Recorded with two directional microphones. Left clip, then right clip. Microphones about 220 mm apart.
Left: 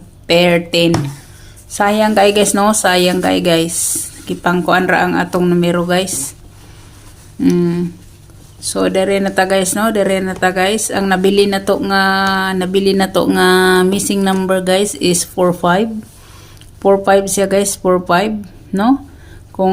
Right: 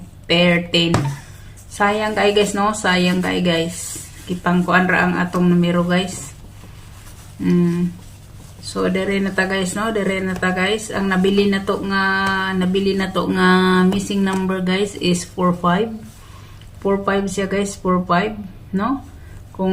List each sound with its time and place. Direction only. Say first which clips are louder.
0.3 s speech: left 5 dB; 50° left (ahead or behind)
7.4 s speech: left 6 dB; 50° left (ahead or behind)